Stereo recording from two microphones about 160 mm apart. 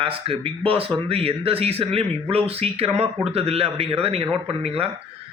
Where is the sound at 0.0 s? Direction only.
35° right (ahead or behind).